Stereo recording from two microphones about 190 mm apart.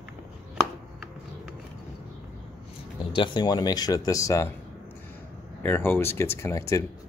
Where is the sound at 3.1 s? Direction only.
25° left (ahead or behind).